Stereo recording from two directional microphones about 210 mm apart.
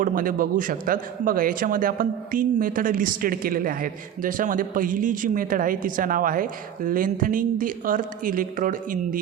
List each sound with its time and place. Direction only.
0.0 s a man's voice: 40° right (ahead or behind)